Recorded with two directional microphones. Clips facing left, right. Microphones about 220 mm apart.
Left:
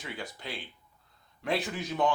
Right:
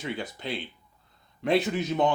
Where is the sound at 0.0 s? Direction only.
25° right (ahead or behind).